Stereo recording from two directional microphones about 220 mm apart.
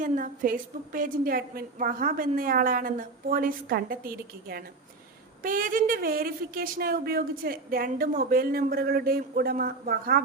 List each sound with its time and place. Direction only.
0.0 s a woman's voice: 35° right (ahead or behind)